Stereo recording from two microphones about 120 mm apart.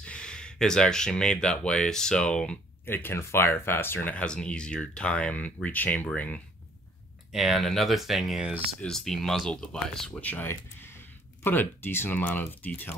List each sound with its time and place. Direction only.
0.0 s speech: 10° left (ahead or behind)
7.3 s speech: centre (ahead or behind)
10.3 s speech: 20° left (ahead or behind)